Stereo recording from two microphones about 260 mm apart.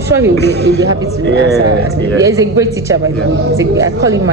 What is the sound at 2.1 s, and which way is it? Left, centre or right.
Speech, centre.